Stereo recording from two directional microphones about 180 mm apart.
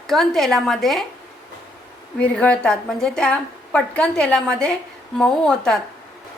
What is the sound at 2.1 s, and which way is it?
A woman's voice, 5° left (ahead or behind).